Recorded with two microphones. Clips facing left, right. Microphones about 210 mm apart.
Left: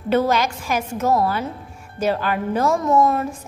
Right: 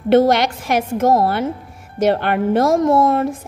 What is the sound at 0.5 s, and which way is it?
A woman's voice, 60° right (ahead or behind).